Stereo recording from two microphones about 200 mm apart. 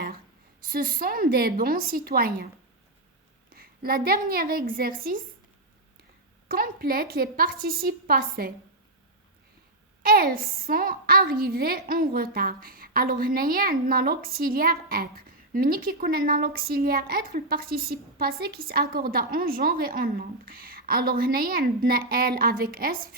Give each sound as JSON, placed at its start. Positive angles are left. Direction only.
{"t": 0.7, "sound": "a woman's voice", "side_deg": -45}
{"t": 3.5, "sound": "a woman's voice", "side_deg": -45}
{"t": 6.5, "sound": "a woman's voice", "side_deg": -45}
{"t": 10.0, "sound": "a woman's voice", "side_deg": -45}